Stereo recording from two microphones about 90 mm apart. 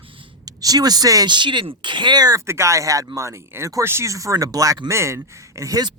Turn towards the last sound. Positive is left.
turn(degrees=-40)  # may be behind; listen again after turning